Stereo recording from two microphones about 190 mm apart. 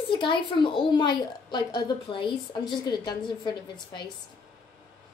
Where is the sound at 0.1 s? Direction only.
25° left (ahead or behind).